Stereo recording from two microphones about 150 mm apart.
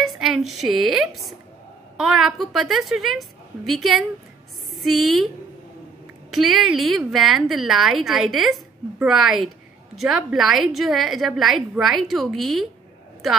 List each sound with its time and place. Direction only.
0.0 s a woman's voice: centre (ahead or behind)
6.3 s a woman's voice: centre (ahead or behind)